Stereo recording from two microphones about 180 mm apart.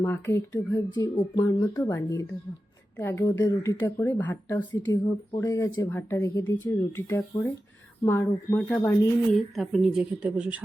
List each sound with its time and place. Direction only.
0.0 s speech: 10° left (ahead or behind)
4.5 s speech: 25° left (ahead or behind)
9.6 s a woman's voice: centre (ahead or behind)